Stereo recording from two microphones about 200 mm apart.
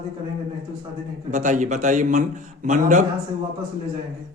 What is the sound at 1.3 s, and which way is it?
Speech, 40° right (ahead or behind).